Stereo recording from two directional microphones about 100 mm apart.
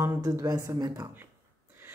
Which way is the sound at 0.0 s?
30° right (ahead or behind).